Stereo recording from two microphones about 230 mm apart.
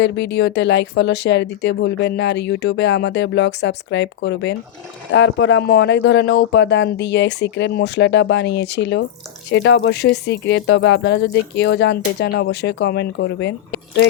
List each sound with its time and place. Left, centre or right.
0.0 s speech: left